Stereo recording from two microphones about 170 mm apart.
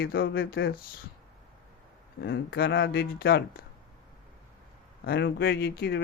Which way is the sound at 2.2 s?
65° left (ahead or behind).